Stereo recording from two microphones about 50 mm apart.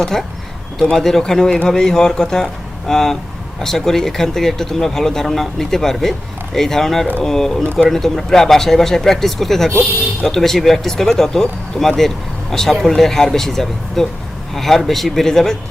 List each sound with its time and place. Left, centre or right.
0.0 s speech: centre